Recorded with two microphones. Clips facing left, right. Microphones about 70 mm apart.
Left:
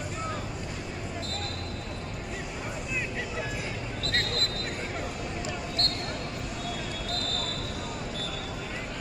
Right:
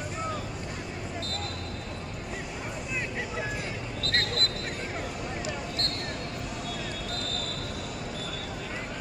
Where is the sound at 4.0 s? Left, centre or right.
Right.